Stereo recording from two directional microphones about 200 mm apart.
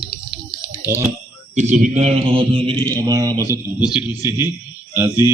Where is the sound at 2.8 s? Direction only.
10° left (ahead or behind).